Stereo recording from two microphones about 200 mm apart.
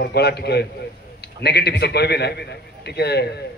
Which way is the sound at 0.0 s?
55° left (ahead or behind).